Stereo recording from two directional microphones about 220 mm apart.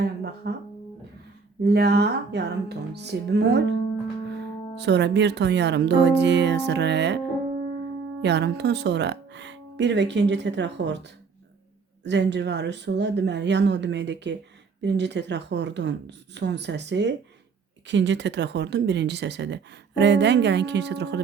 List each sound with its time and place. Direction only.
0.0 s music: 50° right (ahead or behind)
1.6 s speech: 45° right (ahead or behind)
8.2 s speech: 50° right (ahead or behind)
12.0 s speech: 50° right (ahead or behind)